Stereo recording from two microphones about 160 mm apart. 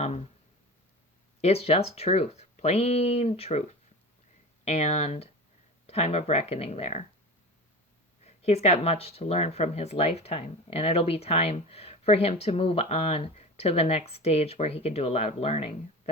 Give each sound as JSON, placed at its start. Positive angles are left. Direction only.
{"t": 1.4, "sound": "speech", "side_deg": 40}
{"t": 8.2, "sound": "speech", "side_deg": 40}